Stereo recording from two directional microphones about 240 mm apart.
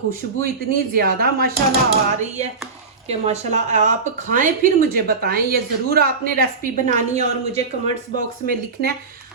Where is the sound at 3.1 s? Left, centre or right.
Right.